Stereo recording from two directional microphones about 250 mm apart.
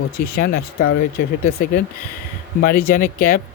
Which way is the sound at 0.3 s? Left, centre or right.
Left.